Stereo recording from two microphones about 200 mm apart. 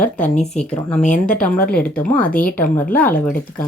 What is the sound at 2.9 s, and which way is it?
Speech, 10° left (ahead or behind).